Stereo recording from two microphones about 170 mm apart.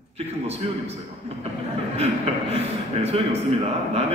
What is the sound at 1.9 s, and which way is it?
A man's voice, 35° right (ahead or behind).